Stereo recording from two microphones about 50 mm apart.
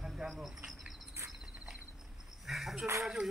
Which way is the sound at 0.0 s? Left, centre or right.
Centre.